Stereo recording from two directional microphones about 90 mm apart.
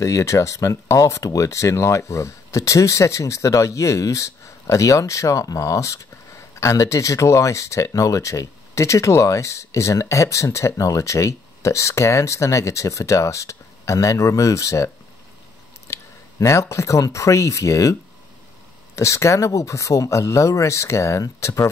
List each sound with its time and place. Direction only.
0.0 s speech: 35° left (ahead or behind)
15.9 s speech: 35° left (ahead or behind)
18.9 s speech: 35° left (ahead or behind)